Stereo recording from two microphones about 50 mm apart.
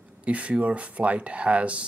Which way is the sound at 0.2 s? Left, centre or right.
Right.